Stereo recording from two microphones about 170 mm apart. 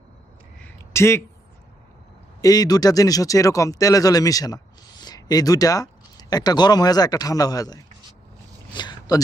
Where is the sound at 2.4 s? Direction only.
20° left (ahead or behind).